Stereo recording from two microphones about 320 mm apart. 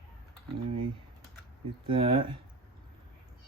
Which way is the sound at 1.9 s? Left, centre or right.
Centre.